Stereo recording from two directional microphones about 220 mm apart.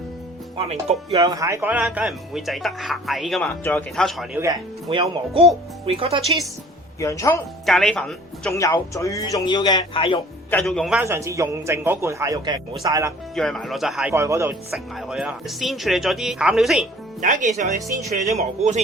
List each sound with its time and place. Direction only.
0.5 s speech: 30° right (ahead or behind)
1.2 s speech: 15° right (ahead or behind); by 4.3 s centre (ahead or behind)
4.4 s speech: 20° right (ahead or behind)
7.0 s a man's voice: 15° left (ahead or behind)
7.6 s speech: centre (ahead or behind)
8.5 s a man's voice: 15° left (ahead or behind)
10.5 s a man's voice: 5° left (ahead or behind); by 13.1 s 15° right (ahead or behind)
13.3 s speech: centre (ahead or behind)
14.7 s speech: centre (ahead or behind)
17.2 s a man's voice: 35° right (ahead or behind)